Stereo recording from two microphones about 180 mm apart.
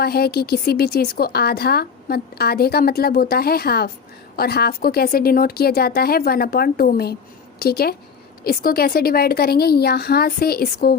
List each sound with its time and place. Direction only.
0.0 s a woman's voice: 60° left (ahead or behind)